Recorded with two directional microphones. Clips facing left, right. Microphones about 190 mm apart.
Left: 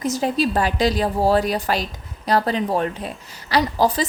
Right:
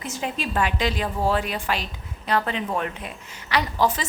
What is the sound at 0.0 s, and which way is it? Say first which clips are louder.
A woman's voice: left 9 dB; 40° left (ahead or behind).